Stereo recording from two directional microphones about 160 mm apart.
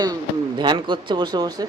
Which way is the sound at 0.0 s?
25° right (ahead or behind).